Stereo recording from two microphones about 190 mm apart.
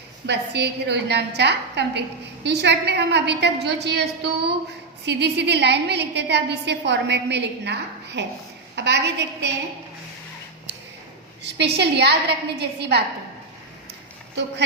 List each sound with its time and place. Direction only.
0.3 s a woman's voice: 65° right (ahead or behind)
11.4 s a woman's voice: 65° right (ahead or behind)